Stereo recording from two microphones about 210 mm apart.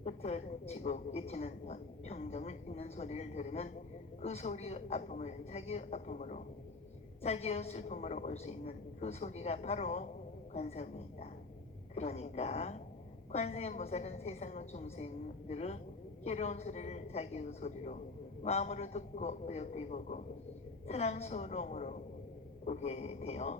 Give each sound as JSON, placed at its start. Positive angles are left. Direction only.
{"t": 0.0, "sound": "a woman's voice", "side_deg": 30}